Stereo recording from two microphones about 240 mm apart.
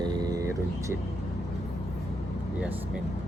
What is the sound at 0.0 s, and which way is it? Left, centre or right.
Vehicle, centre.